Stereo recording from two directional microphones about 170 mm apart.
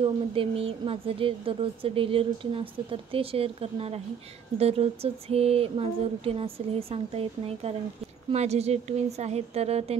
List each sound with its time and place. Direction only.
0.0 s a woman's voice: 35° right (ahead or behind)